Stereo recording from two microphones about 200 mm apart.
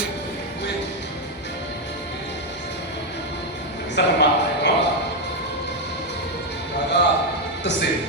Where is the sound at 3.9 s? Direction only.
60° left (ahead or behind).